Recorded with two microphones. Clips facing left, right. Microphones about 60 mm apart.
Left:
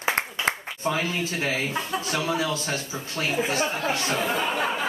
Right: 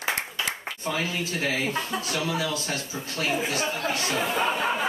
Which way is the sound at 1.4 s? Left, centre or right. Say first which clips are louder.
Right 2 dB; left.